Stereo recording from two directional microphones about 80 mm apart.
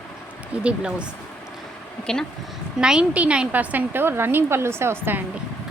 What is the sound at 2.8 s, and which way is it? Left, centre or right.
A woman's voice, centre.